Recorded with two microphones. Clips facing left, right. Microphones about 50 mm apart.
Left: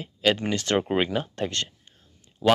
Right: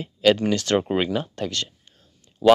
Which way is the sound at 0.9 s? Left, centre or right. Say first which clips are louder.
Right 1 dB; centre.